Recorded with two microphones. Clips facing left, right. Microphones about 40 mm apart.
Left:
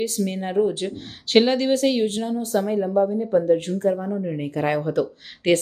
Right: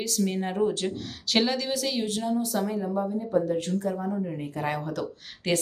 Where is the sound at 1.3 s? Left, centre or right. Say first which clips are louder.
Left 8 dB; left.